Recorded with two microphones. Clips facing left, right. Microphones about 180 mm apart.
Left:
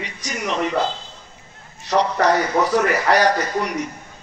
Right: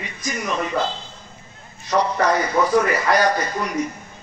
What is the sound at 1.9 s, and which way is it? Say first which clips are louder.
A man's voice: left 1 dB; 75° left (ahead or behind).